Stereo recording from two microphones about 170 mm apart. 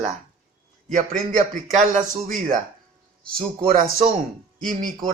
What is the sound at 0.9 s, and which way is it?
A man's voice, 50° right (ahead or behind).